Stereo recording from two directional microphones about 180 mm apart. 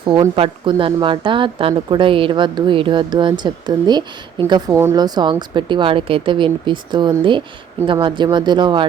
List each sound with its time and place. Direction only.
0.0 s speech: 30° right (ahead or behind)